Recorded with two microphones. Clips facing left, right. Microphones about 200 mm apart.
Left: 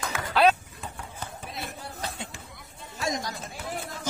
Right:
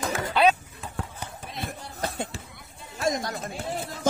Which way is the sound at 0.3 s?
Centre (ahead or behind).